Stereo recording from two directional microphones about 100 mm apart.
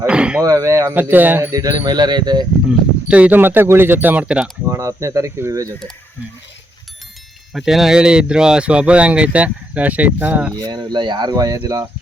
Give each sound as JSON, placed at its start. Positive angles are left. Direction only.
{"t": 0.1, "sound": "speech", "side_deg": -10}
{"t": 0.4, "sound": "speech", "side_deg": -35}
{"t": 0.9, "sound": "speech", "side_deg": -20}
{"t": 1.5, "sound": "speech", "side_deg": -35}
{"t": 2.6, "sound": "speech", "side_deg": -15}
{"t": 4.6, "sound": "speech", "side_deg": -30}
{"t": 7.5, "sound": "speech", "side_deg": -5}
{"t": 10.5, "sound": "speech", "side_deg": -45}